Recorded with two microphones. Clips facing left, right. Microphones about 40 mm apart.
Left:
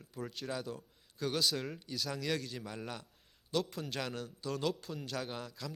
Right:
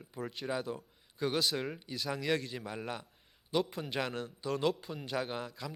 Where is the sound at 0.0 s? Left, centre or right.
Centre.